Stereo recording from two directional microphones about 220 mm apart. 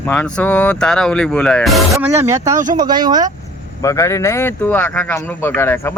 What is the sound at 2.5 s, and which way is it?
Speech, 35° right (ahead or behind).